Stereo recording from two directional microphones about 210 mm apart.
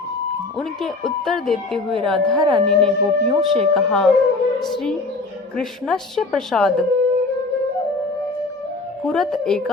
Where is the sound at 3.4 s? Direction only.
30° right (ahead or behind).